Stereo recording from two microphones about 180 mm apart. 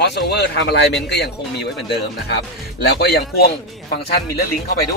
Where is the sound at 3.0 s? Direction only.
60° left (ahead or behind).